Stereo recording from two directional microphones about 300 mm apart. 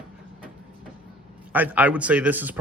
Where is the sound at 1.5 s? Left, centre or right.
Centre.